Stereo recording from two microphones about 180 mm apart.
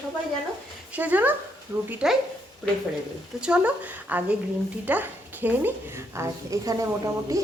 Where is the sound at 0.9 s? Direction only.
10° right (ahead or behind).